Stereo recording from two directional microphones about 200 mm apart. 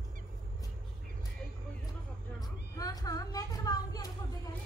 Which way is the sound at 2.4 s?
20° left (ahead or behind).